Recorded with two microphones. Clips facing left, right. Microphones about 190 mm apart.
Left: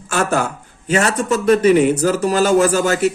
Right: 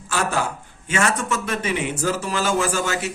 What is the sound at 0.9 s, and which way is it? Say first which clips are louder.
A man's voice: left 6 dB; 35° left (ahead or behind).